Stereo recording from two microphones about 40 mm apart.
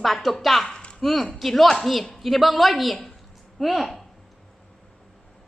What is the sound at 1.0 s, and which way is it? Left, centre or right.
A woman's voice, centre.